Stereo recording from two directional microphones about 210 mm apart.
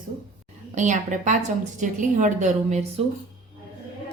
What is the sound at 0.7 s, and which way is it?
Speech, 35° right (ahead or behind).